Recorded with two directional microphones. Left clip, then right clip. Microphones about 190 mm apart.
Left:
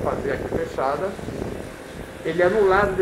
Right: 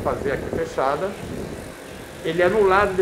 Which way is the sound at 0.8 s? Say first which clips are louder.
Right 2 dB; 20° right (ahead or behind).